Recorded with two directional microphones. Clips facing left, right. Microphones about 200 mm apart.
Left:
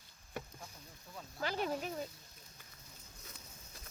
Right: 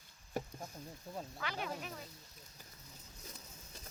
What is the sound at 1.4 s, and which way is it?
Speech, 35° left (ahead or behind).